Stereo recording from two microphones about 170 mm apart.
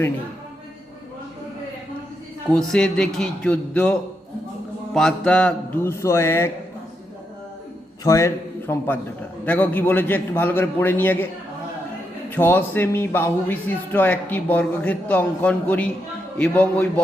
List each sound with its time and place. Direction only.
2.5 s a man's voice: 5° left (ahead or behind)
4.9 s a man's voice: 5° left (ahead or behind)
8.0 s a man's voice: 20° left (ahead or behind)
12.3 s a man's voice: 10° left (ahead or behind)